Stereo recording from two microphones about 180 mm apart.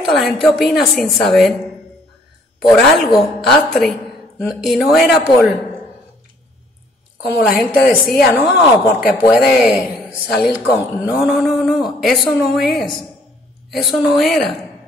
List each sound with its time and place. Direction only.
0.1 s a woman's voice: centre (ahead or behind)
2.7 s a woman's voice: centre (ahead or behind)
7.4 s a woman's voice: 5° right (ahead or behind)